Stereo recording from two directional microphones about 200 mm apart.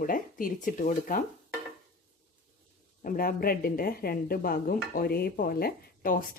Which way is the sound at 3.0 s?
45° left (ahead or behind).